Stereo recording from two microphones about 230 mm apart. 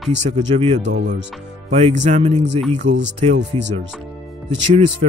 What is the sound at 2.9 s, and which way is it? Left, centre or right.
Speech, right.